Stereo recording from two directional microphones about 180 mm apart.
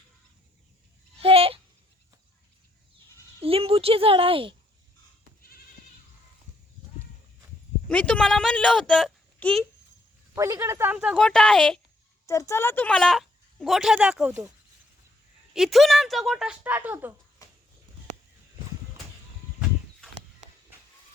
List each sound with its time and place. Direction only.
1.2 s a sound: 30° right (ahead or behind)
3.4 s speech: 30° right (ahead or behind)
5.4 s goat: 55° left (ahead or behind)
7.9 s a woman's voice: 5° left (ahead or behind)
10.3 s speech: 15° right (ahead or behind)
11.2 s speech: 5° left (ahead or behind)
12.2 s speech: 15° left (ahead or behind); by 14.5 s 10° right (ahead or behind)
15.5 s speech: centre (ahead or behind)